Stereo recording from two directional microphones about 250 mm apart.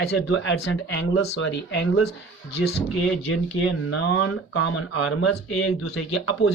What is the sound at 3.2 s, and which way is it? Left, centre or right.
Speech, left.